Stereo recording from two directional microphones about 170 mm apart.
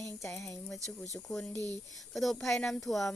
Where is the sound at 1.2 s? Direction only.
5° left (ahead or behind).